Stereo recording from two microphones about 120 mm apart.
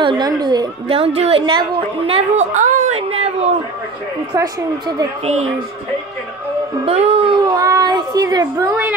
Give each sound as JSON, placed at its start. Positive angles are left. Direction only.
{"t": 0.0, "sound": "a woman's voice", "side_deg": -35}
{"t": 0.8, "sound": "a woman's voice", "side_deg": -50}
{"t": 1.4, "sound": "a woman's voice", "side_deg": -40}
{"t": 2.5, "sound": "a woman's voice", "side_deg": -90}
{"t": 3.1, "sound": "speech", "side_deg": -55}
{"t": 4.4, "sound": "a woman's voice", "side_deg": -30}
{"t": 5.2, "sound": "speech", "side_deg": -60}
{"t": 6.9, "sound": "speech", "side_deg": -55}
{"t": 7.5, "sound": "a child's voice", "side_deg": -30}